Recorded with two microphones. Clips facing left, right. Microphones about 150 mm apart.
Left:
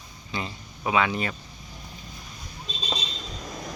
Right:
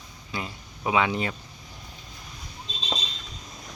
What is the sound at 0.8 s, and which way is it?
Speech, 20° right (ahead or behind).